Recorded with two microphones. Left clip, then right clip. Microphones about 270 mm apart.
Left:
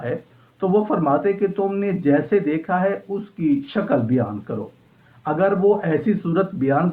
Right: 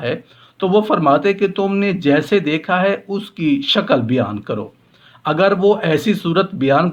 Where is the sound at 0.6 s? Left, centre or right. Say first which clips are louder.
Right 5 dB; right.